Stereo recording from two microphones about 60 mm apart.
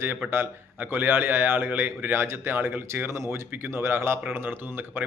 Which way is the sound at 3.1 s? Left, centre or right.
Right.